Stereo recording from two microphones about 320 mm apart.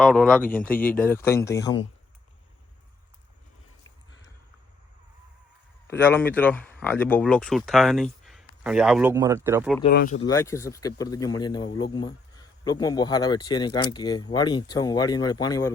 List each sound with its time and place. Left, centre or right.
0.0 s speech: centre
5.9 s speech: centre
9.9 s speech: left
10.2 s speech: centre